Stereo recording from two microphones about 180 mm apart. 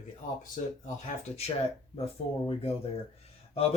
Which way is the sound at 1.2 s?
35° left (ahead or behind).